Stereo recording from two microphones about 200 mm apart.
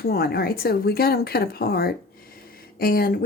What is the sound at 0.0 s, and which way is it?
A woman's voice, 50° left (ahead or behind).